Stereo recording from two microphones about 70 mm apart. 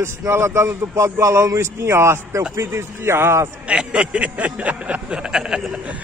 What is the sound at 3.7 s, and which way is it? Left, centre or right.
Speech, centre.